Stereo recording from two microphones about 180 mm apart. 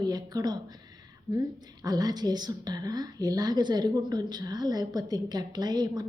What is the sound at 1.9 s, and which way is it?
Speech, 20° right (ahead or behind).